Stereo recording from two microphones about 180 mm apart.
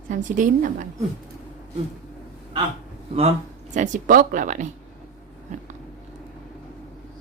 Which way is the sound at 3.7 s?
45° right (ahead or behind).